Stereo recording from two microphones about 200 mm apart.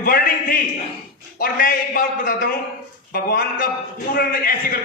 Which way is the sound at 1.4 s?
45° left (ahead or behind).